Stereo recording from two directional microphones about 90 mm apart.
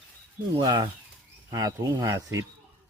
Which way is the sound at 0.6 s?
45° right (ahead or behind).